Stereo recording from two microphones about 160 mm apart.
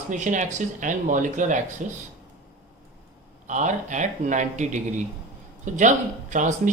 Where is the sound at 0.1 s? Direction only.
50° right (ahead or behind).